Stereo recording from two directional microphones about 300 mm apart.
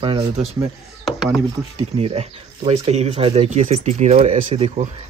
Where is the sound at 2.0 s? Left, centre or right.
Centre.